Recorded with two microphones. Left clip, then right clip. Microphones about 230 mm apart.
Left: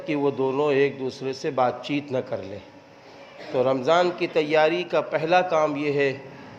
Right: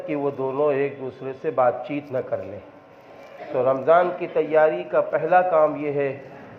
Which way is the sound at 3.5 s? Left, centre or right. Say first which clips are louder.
Right 3 dB; left.